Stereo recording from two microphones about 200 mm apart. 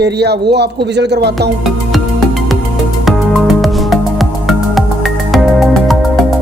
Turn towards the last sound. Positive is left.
turn(degrees=0)  # may be behind; listen again after turning